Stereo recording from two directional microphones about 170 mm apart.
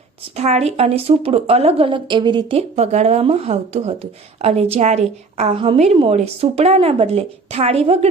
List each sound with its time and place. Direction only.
0.3 s a woman's voice: 40° right (ahead or behind)